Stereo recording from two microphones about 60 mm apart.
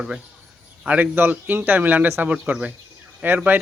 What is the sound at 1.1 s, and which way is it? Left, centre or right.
Speech, right.